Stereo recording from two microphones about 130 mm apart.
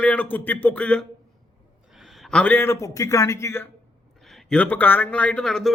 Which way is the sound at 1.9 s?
Centre (ahead or behind).